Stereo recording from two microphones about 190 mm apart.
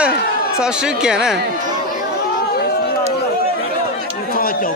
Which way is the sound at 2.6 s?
55° left (ahead or behind).